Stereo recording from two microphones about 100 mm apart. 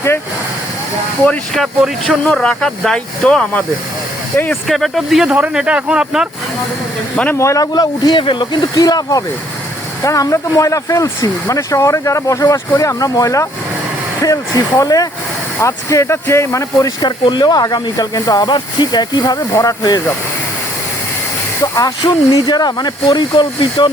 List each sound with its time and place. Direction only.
1.5 s speech: centre (ahead or behind)
4.7 s speech: centre (ahead or behind)
7.3 s speech: 30° left (ahead or behind); by 8.4 s 55° left (ahead or behind)
8.7 s speech: 40° left (ahead or behind)
14.8 s speech: 35° left (ahead or behind)
17.0 s speech: 50° left (ahead or behind)
21.6 s speech: 35° left (ahead or behind); by 23.9 s 50° left (ahead or behind)